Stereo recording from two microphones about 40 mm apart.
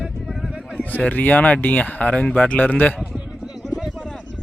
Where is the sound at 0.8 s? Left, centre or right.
Left.